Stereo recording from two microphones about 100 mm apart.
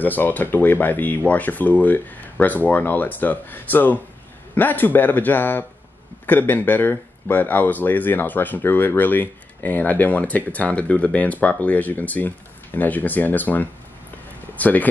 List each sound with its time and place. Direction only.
0.0 s speech: 20° left (ahead or behind)